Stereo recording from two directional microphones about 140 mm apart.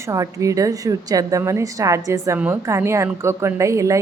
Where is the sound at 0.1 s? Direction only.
25° right (ahead or behind).